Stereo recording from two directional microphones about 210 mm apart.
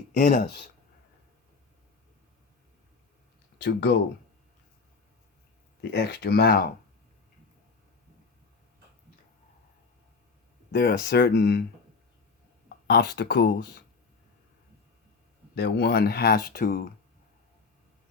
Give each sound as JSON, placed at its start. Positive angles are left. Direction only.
{"t": 0.1, "sound": "speech", "side_deg": 40}
{"t": 3.6, "sound": "speech", "side_deg": 55}
{"t": 5.9, "sound": "speech", "side_deg": 55}
{"t": 10.7, "sound": "speech", "side_deg": 55}
{"t": 12.6, "sound": "speech", "side_deg": 50}
{"t": 15.5, "sound": "speech", "side_deg": 55}